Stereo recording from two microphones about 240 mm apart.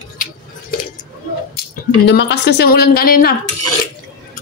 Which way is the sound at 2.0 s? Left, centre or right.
Left.